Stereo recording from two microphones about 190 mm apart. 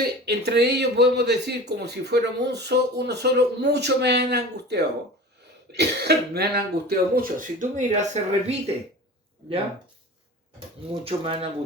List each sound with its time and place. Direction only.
0.0 s speech: 60° right (ahead or behind); by 8.7 s 35° right (ahead or behind)
11.0 s speech: 30° right (ahead or behind)